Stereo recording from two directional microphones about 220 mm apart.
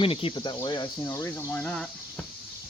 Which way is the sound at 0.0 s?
25° left (ahead or behind).